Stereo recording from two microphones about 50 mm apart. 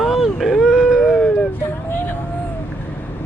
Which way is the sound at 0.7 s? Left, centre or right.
Centre.